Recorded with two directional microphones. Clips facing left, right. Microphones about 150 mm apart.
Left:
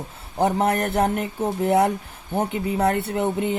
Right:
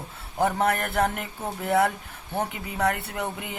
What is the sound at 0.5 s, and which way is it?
Speech, 25° left (ahead or behind).